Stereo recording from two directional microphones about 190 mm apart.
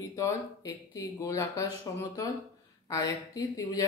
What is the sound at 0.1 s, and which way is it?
Speech, 15° left (ahead or behind).